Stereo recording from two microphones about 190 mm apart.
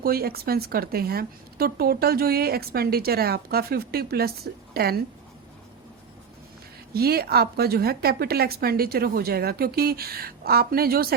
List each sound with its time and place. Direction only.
0.0 s a woman's voice: 55° right (ahead or behind)
6.9 s a woman's voice: 55° right (ahead or behind)